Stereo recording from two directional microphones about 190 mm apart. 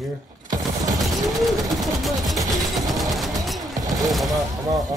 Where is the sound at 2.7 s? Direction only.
Centre (ahead or behind).